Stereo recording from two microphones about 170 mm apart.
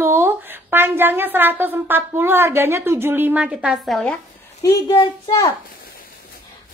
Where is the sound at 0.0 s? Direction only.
15° right (ahead or behind); by 4.2 s centre (ahead or behind).